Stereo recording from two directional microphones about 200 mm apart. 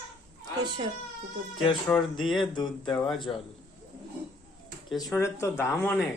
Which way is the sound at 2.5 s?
20° left (ahead or behind).